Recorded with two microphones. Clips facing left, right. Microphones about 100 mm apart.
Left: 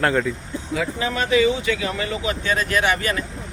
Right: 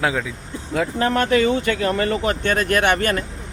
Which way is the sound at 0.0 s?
5° right (ahead or behind).